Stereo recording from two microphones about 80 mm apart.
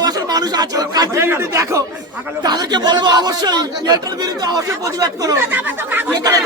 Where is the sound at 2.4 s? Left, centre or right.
Right.